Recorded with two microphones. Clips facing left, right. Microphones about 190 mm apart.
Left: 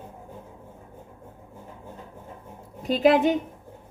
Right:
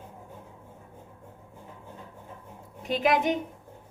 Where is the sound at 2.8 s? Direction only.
30° left (ahead or behind).